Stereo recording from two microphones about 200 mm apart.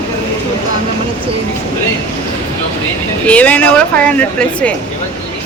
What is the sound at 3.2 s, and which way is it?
Speech, 5° left (ahead or behind).